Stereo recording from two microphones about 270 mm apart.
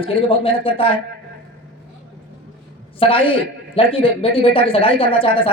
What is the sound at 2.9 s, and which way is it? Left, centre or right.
A man's voice, centre.